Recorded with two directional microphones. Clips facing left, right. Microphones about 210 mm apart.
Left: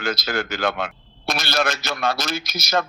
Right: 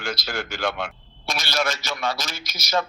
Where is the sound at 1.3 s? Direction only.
55° left (ahead or behind).